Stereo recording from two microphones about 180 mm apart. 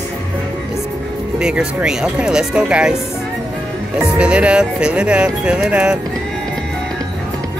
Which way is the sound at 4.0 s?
5° right (ahead or behind).